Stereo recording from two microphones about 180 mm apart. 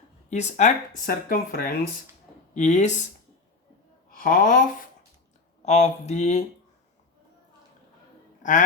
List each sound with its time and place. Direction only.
0.3 s speech: 40° left (ahead or behind)
2.6 s speech: 40° left (ahead or behind)
4.1 s speech: 50° left (ahead or behind)
5.6 s speech: 40° left (ahead or behind)
8.4 s a sound: 45° left (ahead or behind)